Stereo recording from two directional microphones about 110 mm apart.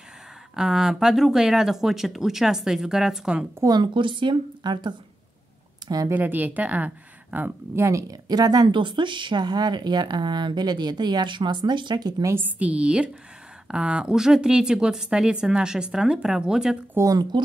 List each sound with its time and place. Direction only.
0.6 s speech: 5° right (ahead or behind)
3.5 s speech: 35° right (ahead or behind)
5.9 s speech: 35° right (ahead or behind)
6.1 s speech: 15° right (ahead or behind); by 12.4 s 35° right (ahead or behind)
12.4 s a woman's voice: 15° right (ahead or behind)
16.9 s speech: 30° right (ahead or behind)